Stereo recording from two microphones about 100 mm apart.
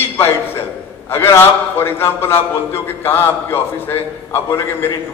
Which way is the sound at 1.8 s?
25° left (ahead or behind).